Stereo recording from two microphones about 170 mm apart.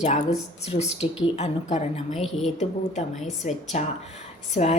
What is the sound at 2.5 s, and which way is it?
A woman's voice, 45° left (ahead or behind).